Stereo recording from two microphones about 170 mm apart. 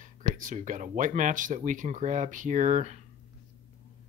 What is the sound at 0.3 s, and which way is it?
Speech, 50° right (ahead or behind).